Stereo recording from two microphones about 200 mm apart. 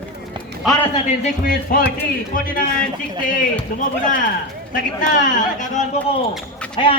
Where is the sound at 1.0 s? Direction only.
40° left (ahead or behind).